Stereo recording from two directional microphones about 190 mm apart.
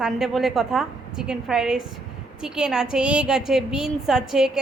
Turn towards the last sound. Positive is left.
turn(degrees=-5)  # may be behind; listen again after turning